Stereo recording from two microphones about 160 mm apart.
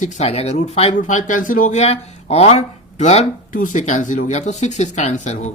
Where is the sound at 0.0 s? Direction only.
45° left (ahead or behind).